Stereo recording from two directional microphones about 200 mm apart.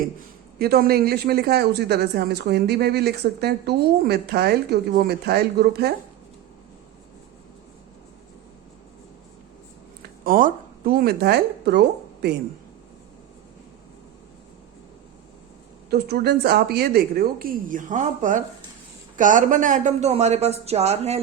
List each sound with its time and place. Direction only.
0.6 s speech: 50° right (ahead or behind)
10.0 s a woman's voice: 45° right (ahead or behind)
15.9 s speech: 50° right (ahead or behind); by 21.2 s 30° right (ahead or behind)